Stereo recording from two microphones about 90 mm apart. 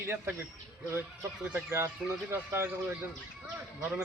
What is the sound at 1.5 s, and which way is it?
A man's voice, 30° right (ahead or behind).